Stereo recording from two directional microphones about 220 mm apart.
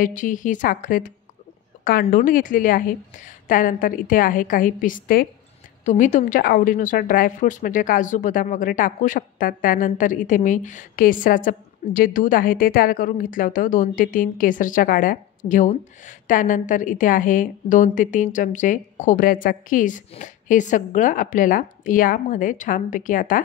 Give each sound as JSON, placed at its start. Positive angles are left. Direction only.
{"t": 0.0, "sound": "a woman's voice", "side_deg": 35}